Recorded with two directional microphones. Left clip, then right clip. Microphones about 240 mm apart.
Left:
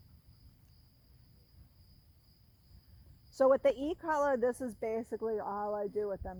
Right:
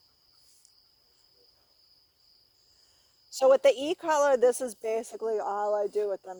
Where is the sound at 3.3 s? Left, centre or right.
Right.